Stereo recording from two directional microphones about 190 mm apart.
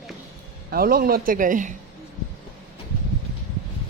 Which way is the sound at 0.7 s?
50° right (ahead or behind).